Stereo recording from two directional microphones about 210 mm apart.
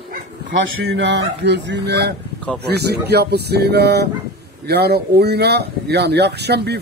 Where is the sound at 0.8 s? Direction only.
55° right (ahead or behind).